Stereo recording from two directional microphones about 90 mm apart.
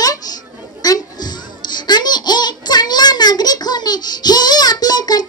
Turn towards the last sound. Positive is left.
turn(degrees=50)  # may be behind; listen again after turning